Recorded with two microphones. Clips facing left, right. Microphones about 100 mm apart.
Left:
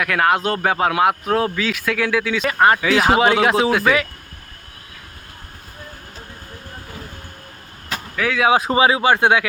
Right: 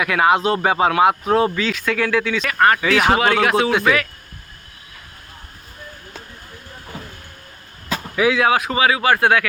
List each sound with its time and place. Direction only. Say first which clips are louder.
0.0 s speech: right 2 dB; 5° right (ahead or behind); by 3.5 s 15° left (ahead or behind)
3.7 s speech: even; centre (ahead or behind)
8.1 s speech: right 5 dB; 10° right (ahead or behind)
8.5 s speech: left 2 dB; 30° left (ahead or behind)